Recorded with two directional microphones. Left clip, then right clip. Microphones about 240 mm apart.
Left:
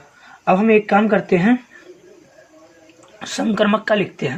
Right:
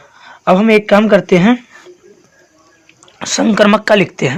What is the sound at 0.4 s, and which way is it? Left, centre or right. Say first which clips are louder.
Speech: right 5 dB; right.